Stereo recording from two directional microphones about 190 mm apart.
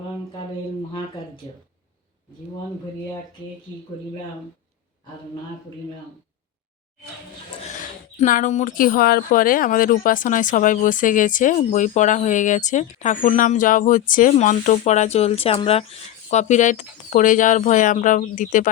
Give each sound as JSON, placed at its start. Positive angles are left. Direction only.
{"t": 8.1, "sound": "speech", "side_deg": 40}